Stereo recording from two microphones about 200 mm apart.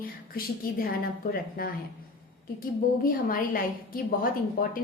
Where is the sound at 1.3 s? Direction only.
50° left (ahead or behind).